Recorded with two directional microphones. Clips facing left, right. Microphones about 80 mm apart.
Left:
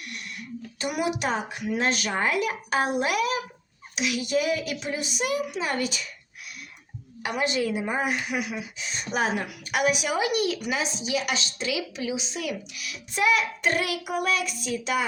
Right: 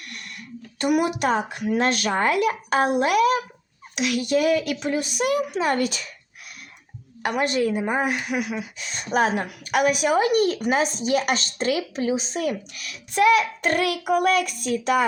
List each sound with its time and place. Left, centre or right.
0.8 s a woman's voice: right
7.2 s a woman's voice: right